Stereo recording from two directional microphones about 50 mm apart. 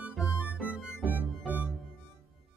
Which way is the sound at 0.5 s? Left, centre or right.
Right.